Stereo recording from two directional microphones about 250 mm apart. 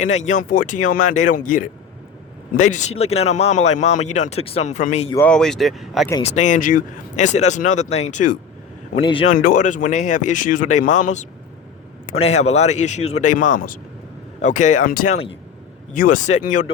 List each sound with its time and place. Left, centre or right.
0.0 s speech: left
5.1 s speech: centre
6.1 s speech: centre
6.3 s speech: left